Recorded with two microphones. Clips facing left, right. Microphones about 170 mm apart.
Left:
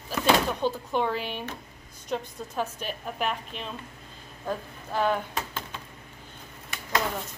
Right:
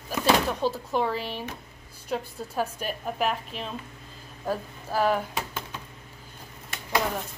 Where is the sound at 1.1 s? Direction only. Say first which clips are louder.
Even; 35° right (ahead or behind).